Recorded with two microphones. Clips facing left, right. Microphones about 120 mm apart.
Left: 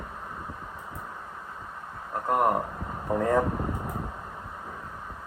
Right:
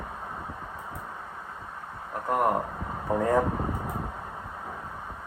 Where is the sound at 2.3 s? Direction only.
Centre (ahead or behind).